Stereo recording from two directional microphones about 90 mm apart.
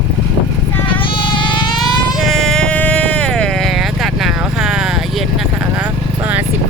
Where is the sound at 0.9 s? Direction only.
70° left (ahead or behind).